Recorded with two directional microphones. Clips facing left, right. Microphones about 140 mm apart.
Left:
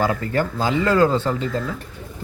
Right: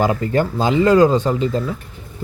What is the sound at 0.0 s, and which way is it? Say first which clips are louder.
Speech: right 4 dB; 20° right (ahead or behind).